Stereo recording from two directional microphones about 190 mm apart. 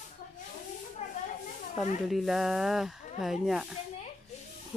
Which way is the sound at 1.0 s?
40° left (ahead or behind).